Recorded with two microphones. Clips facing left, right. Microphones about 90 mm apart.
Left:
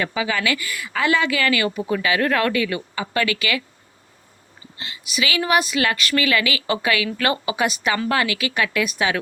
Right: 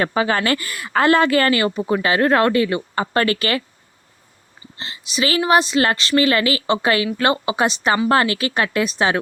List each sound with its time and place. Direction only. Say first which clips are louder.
0.0 s a woman's voice: right 4 dB; 45° right (ahead or behind)
2.9 s a woman's voice: right 4 dB; 45° right (ahead or behind)
4.8 s a woman's voice: right 3 dB; 30° right (ahead or behind)